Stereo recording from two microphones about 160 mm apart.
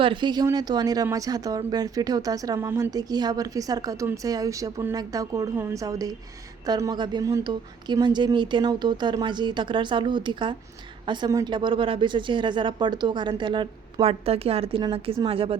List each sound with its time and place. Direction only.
0.0 s a woman's voice: 30° right (ahead or behind)